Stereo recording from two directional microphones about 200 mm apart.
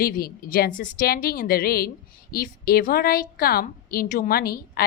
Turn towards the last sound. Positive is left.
turn(degrees=50)  # may be behind; listen again after turning